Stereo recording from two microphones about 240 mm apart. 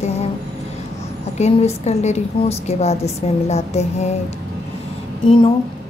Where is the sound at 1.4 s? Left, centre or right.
Left.